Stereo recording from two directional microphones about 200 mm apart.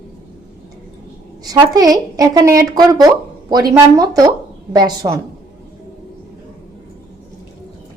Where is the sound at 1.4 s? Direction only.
20° right (ahead or behind).